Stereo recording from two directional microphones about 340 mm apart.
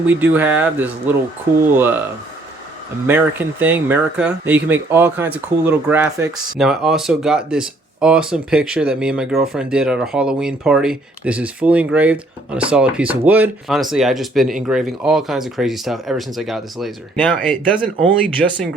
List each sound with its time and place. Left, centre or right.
0.0 s speech: centre
3.1 s speech: centre